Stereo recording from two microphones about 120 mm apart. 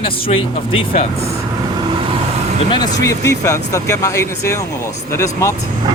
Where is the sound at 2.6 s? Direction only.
40° left (ahead or behind).